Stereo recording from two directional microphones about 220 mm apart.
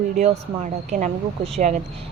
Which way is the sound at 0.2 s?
35° right (ahead or behind).